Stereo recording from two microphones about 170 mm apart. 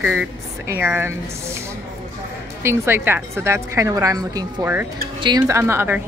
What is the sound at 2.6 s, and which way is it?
Speech, 15° right (ahead or behind).